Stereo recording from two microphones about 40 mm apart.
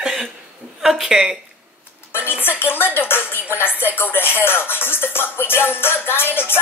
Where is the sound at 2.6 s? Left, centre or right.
Left.